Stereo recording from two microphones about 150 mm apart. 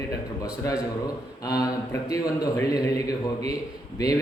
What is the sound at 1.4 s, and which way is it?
A man's voice, 25° left (ahead or behind).